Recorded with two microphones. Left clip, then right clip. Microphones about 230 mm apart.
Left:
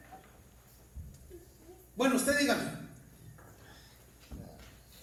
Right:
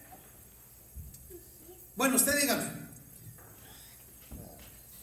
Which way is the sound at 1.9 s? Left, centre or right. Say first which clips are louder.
Even; right.